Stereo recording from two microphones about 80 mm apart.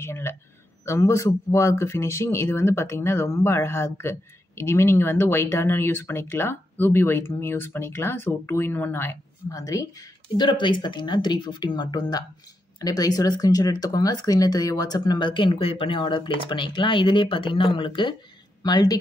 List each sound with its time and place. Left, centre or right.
0.0 s speech: left
9.5 s speech: left
10.3 s speech: left
18.6 s speech: left